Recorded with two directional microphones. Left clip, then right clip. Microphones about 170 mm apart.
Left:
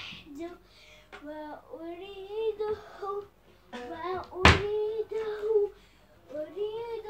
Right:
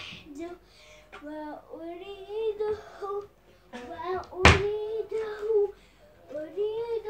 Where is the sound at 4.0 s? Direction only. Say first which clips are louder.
Right 2 dB; centre (ahead or behind).